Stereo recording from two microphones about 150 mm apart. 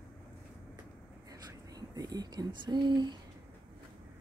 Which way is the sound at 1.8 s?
25° right (ahead or behind).